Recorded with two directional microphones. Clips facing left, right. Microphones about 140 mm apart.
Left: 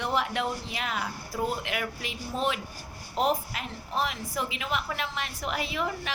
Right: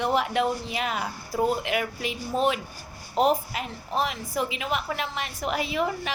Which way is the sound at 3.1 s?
45° right (ahead or behind).